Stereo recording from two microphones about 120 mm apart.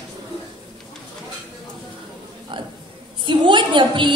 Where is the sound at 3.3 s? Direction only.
40° right (ahead or behind).